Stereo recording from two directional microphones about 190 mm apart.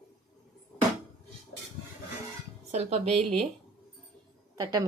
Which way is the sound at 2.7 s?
35° right (ahead or behind).